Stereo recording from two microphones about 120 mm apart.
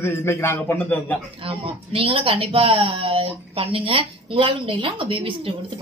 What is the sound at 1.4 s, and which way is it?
Speech, 50° right (ahead or behind).